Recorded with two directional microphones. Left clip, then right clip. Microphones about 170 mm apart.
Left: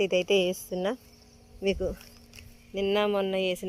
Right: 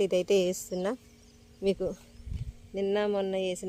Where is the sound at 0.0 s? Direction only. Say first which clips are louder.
Left 1 dB; 25° right (ahead or behind).